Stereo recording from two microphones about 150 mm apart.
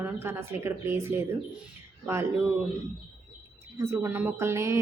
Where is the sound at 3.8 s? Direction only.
20° right (ahead or behind).